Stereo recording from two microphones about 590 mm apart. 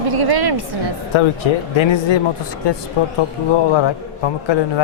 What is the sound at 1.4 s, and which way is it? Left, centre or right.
Speech, left.